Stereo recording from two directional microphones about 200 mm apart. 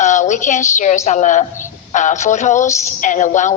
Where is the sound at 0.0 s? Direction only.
35° left (ahead or behind).